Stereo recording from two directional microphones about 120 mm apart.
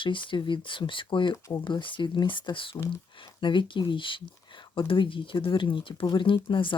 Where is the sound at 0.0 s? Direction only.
45° left (ahead or behind).